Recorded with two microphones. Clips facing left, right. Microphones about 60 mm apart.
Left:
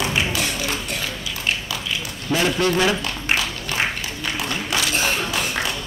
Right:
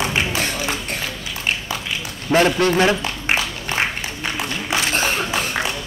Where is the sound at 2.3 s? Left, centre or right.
Right.